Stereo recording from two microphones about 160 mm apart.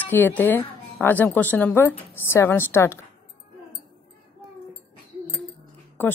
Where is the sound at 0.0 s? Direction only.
10° left (ahead or behind).